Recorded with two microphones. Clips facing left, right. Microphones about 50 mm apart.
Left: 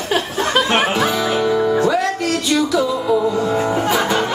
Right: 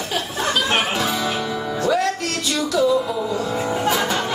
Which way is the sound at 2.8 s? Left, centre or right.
Left.